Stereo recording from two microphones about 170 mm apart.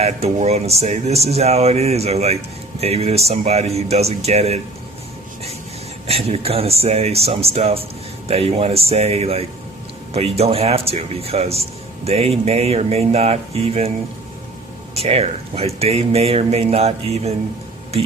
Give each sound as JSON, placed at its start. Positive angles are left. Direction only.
{"t": 0.0, "sound": "speech", "side_deg": -40}
{"t": 6.1, "sound": "speech", "side_deg": -35}
{"t": 14.9, "sound": "speech", "side_deg": -35}